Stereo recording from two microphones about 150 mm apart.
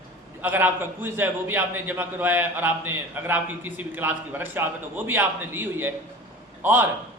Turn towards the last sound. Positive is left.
turn(degrees=-15)  # may be behind; listen again after turning